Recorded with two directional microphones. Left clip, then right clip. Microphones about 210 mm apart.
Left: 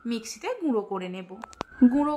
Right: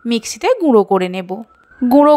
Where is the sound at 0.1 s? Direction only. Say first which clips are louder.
Right 17 dB; 35° right (ahead or behind).